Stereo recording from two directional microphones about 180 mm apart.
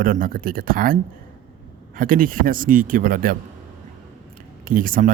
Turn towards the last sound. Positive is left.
turn(degrees=-50)  # may be behind; listen again after turning